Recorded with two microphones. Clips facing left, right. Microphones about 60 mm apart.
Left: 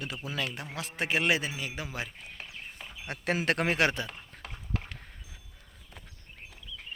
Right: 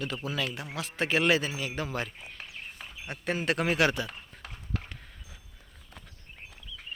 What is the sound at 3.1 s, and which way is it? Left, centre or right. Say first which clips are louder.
Speech: left 1 dB; left.